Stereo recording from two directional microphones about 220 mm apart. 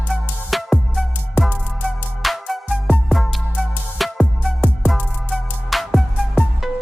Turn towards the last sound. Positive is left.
turn(degrees=0)  # may be behind; listen again after turning